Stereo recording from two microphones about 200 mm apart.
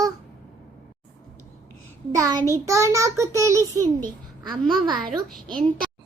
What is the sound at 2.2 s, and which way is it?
A child's voice, 20° right (ahead or behind).